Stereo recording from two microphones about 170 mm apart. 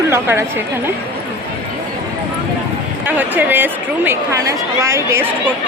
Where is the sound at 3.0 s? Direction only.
10° right (ahead or behind).